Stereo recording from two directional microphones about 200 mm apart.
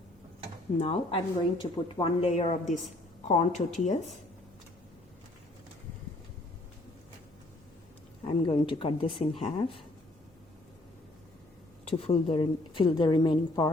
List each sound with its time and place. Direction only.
0.8 s a woman's voice: 30° left (ahead or behind)
8.2 s speech: 25° left (ahead or behind)
11.9 s speech: 30° left (ahead or behind)